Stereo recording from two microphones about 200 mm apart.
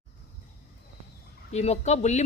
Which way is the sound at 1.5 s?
35° left (ahead or behind).